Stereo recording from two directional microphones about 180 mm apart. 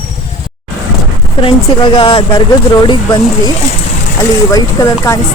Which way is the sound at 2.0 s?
30° left (ahead or behind).